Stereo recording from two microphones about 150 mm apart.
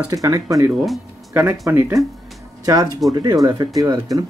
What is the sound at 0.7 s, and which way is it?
Speech, 5° right (ahead or behind).